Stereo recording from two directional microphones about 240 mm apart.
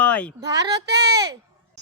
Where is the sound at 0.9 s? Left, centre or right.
Right.